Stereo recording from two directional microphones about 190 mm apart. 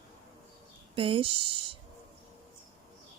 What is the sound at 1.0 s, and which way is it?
Speech, 30° right (ahead or behind).